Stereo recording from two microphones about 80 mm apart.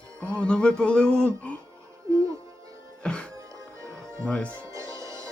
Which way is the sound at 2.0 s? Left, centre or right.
Right.